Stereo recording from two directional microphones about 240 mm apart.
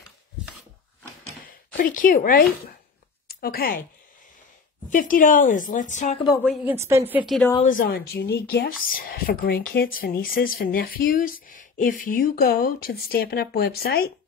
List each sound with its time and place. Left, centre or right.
1.4 s speech: left
4.8 s speech: left
6.4 s a woman's voice: centre
7.6 s speech: left